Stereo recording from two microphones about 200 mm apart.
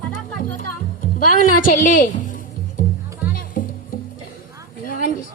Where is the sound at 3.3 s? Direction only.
45° left (ahead or behind).